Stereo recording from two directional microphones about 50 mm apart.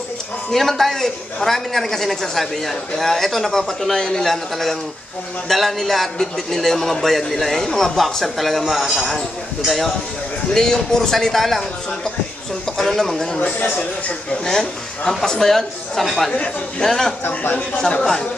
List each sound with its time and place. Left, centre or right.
0.5 s a man's voice: centre
17.3 s speech: left
17.6 s a man's voice: centre